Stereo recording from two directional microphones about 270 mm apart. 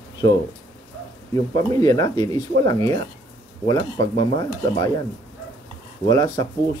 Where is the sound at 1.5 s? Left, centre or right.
Centre.